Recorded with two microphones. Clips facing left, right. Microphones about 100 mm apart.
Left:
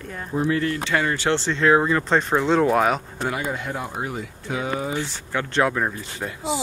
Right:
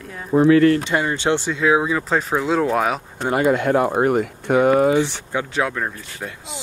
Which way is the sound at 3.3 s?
70° right (ahead or behind).